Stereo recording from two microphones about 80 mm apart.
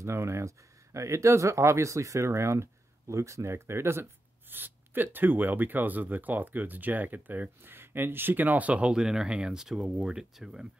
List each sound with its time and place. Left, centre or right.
0.0 s speech: right; by 10.7 s centre